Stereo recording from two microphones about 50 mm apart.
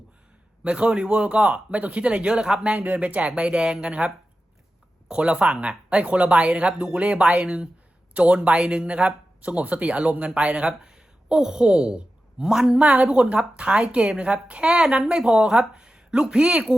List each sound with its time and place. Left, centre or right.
0.6 s speech: right
2.7 s speech: right; by 12.8 s centre
12.8 s speech: right